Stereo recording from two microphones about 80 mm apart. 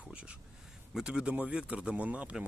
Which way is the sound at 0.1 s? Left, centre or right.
Centre.